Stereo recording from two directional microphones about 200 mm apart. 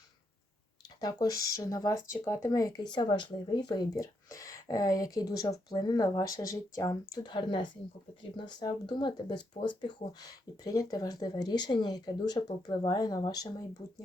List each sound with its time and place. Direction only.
1.0 s speech: 20° left (ahead or behind)